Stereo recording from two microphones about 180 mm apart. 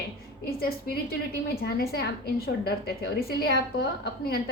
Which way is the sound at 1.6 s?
60° left (ahead or behind).